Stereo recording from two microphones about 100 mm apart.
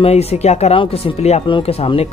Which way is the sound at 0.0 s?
90° left.